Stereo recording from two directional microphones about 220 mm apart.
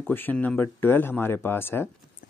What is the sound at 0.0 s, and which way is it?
Speech, 10° left (ahead or behind).